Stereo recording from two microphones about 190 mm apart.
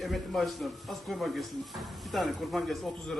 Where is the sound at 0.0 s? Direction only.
Centre (ahead or behind).